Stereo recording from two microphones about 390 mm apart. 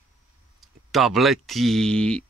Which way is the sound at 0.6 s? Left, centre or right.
Centre.